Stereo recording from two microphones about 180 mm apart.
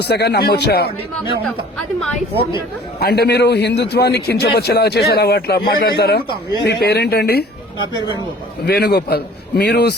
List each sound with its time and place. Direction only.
0.0 s a man's voice: 65° left (ahead or behind)
3.0 s a man's voice: 65° left (ahead or behind)
8.6 s a man's voice: 65° left (ahead or behind)